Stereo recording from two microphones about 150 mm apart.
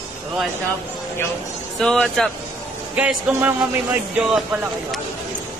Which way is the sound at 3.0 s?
10° right (ahead or behind).